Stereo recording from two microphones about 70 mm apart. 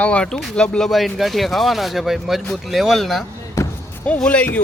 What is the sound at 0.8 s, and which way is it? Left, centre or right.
Speech, centre.